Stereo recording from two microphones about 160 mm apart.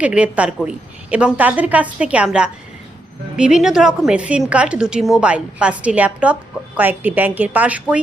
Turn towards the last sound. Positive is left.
turn(degrees=-10)  # may be behind; listen again after turning